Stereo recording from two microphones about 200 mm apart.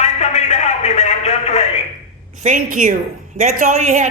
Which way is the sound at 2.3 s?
40° right (ahead or behind).